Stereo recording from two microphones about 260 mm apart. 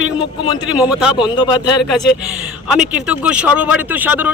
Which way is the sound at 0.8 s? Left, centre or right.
Centre.